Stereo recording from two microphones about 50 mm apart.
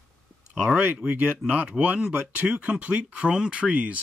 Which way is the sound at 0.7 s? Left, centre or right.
Centre.